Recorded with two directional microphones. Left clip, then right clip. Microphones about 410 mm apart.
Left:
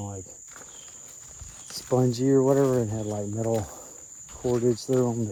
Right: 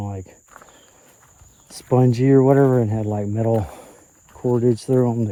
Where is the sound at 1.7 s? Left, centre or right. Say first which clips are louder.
Right 6 dB; right.